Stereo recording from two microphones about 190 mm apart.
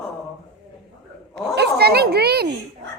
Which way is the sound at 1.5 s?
60° right (ahead or behind).